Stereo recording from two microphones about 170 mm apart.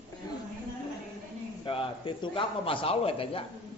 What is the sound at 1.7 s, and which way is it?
A man's voice, 30° left (ahead or behind).